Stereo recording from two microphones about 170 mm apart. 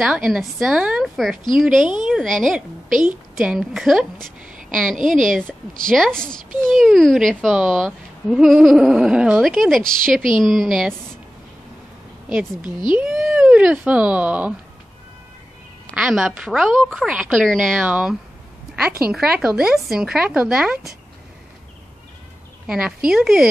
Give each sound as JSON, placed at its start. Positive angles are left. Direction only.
{"t": 0.0, "sound": "a woman's voice", "side_deg": 0}
{"t": 4.5, "sound": "a sound", "side_deg": -50}
{"t": 4.9, "sound": "a woman's voice", "side_deg": -50}
{"t": 5.9, "sound": "speech", "side_deg": 0}
{"t": 12.9, "sound": "speech", "side_deg": -5}
{"t": 15.9, "sound": "speech", "side_deg": -5}
{"t": 19.4, "sound": "speech", "side_deg": -5}
{"t": 22.7, "sound": "speech", "side_deg": -5}